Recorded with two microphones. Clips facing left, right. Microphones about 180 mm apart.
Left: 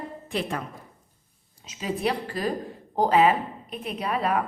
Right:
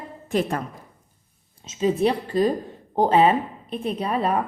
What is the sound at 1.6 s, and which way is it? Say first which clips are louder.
A woman's voice: right 7 dB; 25° right (ahead or behind).